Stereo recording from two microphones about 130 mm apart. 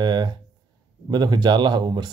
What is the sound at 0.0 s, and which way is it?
A man's voice, 35° right (ahead or behind).